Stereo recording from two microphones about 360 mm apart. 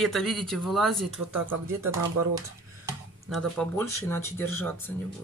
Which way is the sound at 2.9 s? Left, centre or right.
Centre.